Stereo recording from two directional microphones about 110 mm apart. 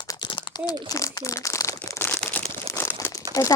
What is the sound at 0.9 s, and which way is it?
Speech, 30° left (ahead or behind).